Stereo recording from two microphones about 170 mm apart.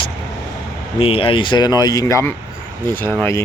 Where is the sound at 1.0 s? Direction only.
35° left (ahead or behind); by 2.3 s 15° left (ahead or behind).